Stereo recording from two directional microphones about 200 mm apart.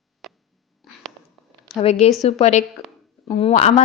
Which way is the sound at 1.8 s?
30° left (ahead or behind).